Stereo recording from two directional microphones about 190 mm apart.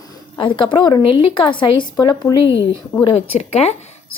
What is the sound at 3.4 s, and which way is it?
Speech, 35° left (ahead or behind).